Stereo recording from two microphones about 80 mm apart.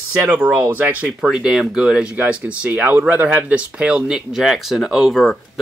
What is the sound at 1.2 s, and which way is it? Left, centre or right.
Speech, centre.